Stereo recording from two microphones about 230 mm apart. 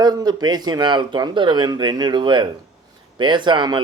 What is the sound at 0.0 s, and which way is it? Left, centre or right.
Speech, centre.